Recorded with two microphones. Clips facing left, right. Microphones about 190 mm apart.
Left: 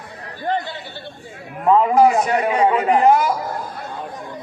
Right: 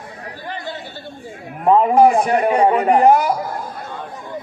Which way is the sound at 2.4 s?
50° right (ahead or behind).